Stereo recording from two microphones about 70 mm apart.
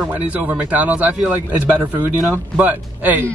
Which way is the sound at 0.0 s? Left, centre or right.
Right.